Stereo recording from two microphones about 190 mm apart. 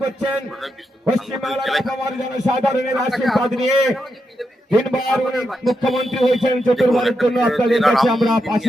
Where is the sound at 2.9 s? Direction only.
Centre (ahead or behind).